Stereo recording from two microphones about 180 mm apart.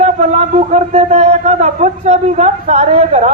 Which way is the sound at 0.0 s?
40° right (ahead or behind).